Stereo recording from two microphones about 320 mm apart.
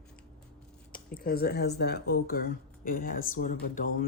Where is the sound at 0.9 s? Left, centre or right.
Left.